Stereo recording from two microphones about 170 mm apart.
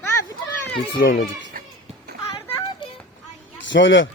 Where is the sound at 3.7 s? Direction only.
90° left.